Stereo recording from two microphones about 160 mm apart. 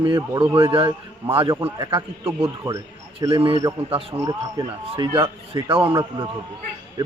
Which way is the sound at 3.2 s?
35° right (ahead or behind).